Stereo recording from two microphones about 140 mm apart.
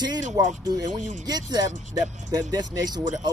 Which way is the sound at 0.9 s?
65° right (ahead or behind).